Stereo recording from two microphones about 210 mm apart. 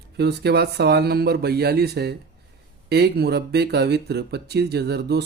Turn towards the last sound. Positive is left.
turn(degrees=-50)  # may be behind; listen again after turning